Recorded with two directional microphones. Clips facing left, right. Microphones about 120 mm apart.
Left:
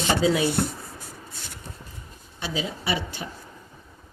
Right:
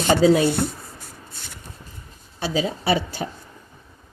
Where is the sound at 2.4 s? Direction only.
40° right (ahead or behind).